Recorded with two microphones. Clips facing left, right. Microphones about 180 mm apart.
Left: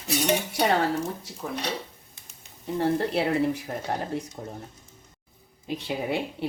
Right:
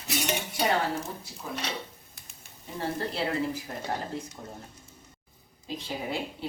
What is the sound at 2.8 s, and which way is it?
Speech, 60° left (ahead or behind).